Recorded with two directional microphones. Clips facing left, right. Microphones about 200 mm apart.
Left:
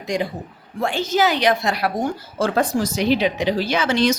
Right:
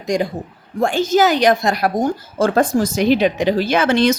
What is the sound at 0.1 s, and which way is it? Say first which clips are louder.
A woman's voice: right 4 dB; 45° right (ahead or behind).